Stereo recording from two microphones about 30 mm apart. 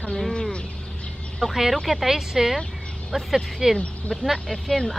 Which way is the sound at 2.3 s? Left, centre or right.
Centre.